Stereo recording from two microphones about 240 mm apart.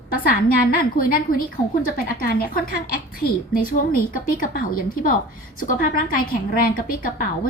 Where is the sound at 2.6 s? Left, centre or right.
Left.